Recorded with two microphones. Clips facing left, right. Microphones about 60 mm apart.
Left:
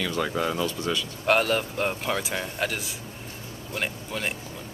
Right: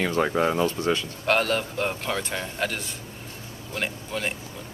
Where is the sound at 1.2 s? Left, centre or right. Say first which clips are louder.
Left 2 dB; centre.